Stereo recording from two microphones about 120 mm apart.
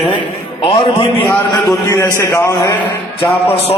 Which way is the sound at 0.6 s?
50° left (ahead or behind).